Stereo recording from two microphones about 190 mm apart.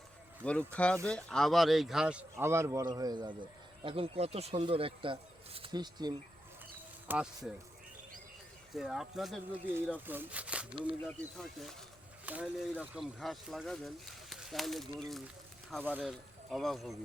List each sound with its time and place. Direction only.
0.4 s speech: 5° left (ahead or behind); by 6.1 s 20° right (ahead or behind)
7.1 s speech: 5° right (ahead or behind)
8.7 s speech: centre (ahead or behind)
12.2 s speech: 10° right (ahead or behind)